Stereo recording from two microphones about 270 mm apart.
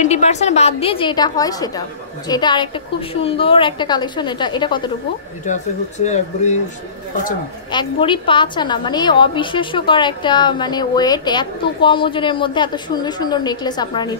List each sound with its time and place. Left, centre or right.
0.0 s a woman's voice: left
7.7 s a woman's voice: centre